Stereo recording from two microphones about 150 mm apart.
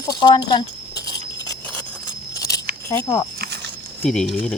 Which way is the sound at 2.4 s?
20° left (ahead or behind).